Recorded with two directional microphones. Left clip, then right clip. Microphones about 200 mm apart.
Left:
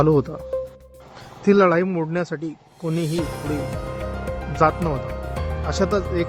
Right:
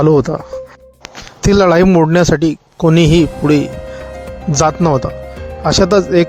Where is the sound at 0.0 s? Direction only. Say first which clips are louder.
Right 7 dB; 35° right (ahead or behind).